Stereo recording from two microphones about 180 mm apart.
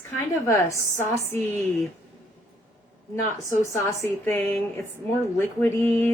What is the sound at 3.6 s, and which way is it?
A woman's voice, 15° left (ahead or behind).